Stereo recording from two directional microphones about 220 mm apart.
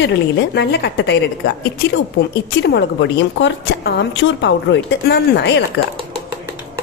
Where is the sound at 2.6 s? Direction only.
50° left (ahead or behind).